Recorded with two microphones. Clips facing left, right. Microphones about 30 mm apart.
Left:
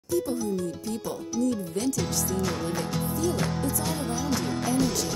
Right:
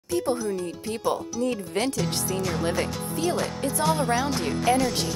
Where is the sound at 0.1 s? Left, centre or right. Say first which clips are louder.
Even; right.